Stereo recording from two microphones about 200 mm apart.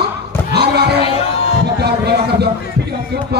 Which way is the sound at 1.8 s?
55° right (ahead or behind).